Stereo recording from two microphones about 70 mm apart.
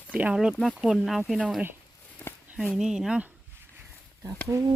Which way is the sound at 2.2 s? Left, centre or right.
Left.